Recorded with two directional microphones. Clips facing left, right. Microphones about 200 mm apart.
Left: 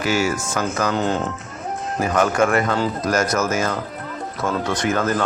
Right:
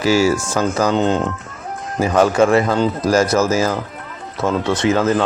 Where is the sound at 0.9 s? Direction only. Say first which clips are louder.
Right 5 dB; 20° right (ahead or behind).